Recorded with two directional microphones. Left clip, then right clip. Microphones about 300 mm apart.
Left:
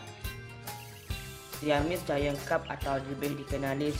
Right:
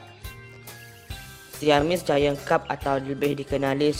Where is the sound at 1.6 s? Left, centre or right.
Right.